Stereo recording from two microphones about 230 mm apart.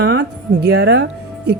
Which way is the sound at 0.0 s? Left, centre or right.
Right.